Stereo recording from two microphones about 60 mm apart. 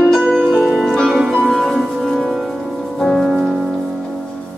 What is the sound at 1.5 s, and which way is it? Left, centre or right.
Music, centre.